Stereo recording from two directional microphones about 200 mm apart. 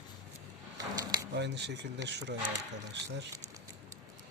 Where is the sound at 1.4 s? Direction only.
60° right (ahead or behind).